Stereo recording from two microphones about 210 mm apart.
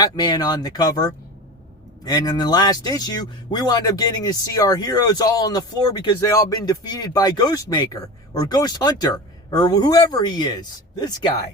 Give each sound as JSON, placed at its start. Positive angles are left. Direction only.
{"t": 0.0, "sound": "speech", "side_deg": 20}